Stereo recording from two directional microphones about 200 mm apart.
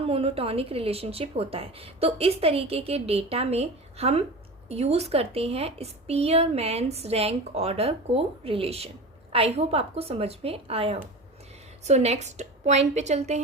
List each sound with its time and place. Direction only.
0.0 s a woman's voice: 30° right (ahead or behind)